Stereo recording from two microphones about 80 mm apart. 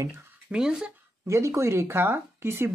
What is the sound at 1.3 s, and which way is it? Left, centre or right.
Speech, right.